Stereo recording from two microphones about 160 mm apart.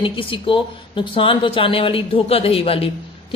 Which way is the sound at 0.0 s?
30° left (ahead or behind).